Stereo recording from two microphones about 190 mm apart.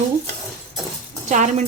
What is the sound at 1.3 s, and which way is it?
Speech, 40° right (ahead or behind).